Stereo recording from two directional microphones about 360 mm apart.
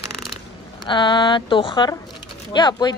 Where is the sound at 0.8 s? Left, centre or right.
Centre.